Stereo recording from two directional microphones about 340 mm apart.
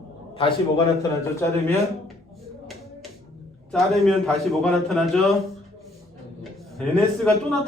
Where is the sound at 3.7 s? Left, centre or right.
Centre.